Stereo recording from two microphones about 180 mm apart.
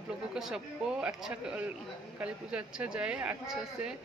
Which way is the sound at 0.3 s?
5° right (ahead or behind).